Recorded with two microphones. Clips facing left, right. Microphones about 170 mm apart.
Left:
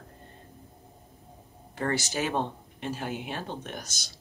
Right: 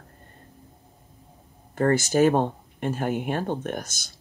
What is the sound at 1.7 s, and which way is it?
Speech, 50° right (ahead or behind).